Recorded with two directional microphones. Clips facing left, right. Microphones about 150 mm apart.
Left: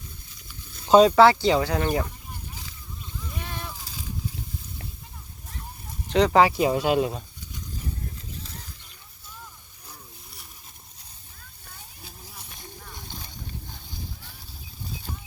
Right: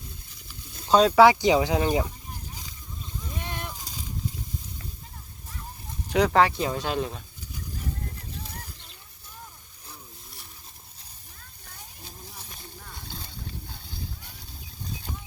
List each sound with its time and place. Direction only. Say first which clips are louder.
0.9 s speech: left 4 dB; centre (ahead or behind)
1.2 s speech: even; 15° right (ahead or behind)
3.2 s vehicle: right 1 dB; 15° right (ahead or behind)
6.1 s speech: left 2 dB; 5° right (ahead or behind); by 7.2 s 10° left (ahead or behind)